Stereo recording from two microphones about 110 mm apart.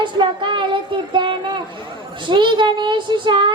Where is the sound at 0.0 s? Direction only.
45° right (ahead or behind).